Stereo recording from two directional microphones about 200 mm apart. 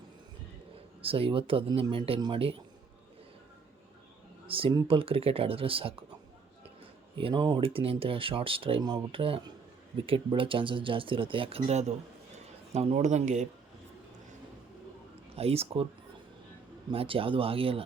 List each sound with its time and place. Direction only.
1.0 s speech: 25° right (ahead or behind)
4.4 s speech: 25° right (ahead or behind)
7.2 s speech: 25° right (ahead or behind)
15.4 s speech: 30° right (ahead or behind)
16.9 s speech: 25° right (ahead or behind)